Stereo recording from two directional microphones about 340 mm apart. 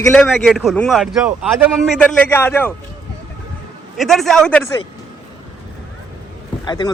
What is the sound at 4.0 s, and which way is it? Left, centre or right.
Speech, centre.